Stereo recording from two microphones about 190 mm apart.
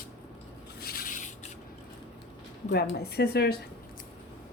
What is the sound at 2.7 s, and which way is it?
Speech, 60° left (ahead or behind).